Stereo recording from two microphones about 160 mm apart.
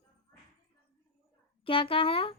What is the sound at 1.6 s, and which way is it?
Speech, 35° left (ahead or behind).